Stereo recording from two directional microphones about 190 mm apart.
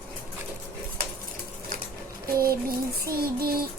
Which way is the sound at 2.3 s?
50° right (ahead or behind).